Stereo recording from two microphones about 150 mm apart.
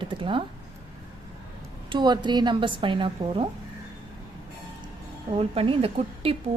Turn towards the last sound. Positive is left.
turn(degrees=-40)  # may be behind; listen again after turning